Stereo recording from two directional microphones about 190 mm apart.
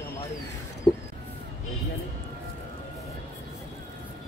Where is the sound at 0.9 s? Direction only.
25° left (ahead or behind).